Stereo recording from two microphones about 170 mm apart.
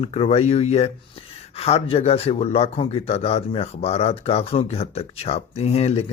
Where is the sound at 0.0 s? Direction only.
35° left (ahead or behind).